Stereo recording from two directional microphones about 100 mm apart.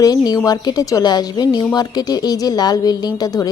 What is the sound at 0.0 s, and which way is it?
Speech, 40° left (ahead or behind).